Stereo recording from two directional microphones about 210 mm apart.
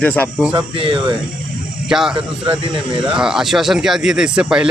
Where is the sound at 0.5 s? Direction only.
25° right (ahead or behind).